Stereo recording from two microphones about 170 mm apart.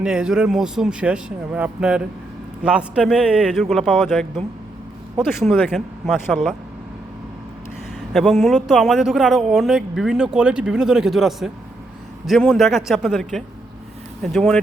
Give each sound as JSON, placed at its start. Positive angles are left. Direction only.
{"t": 0.0, "sound": "a man's voice", "side_deg": -5}
{"t": 8.1, "sound": "a man's voice", "side_deg": 0}